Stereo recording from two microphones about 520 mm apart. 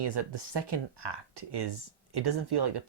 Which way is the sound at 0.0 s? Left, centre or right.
Right.